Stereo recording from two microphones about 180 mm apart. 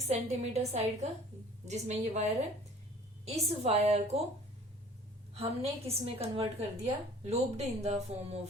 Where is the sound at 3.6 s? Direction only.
35° right (ahead or behind).